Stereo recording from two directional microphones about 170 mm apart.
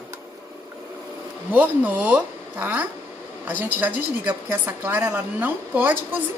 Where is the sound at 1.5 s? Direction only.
10° right (ahead or behind).